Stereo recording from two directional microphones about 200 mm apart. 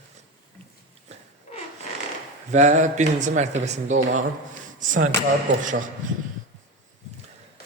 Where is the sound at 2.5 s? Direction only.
35° right (ahead or behind).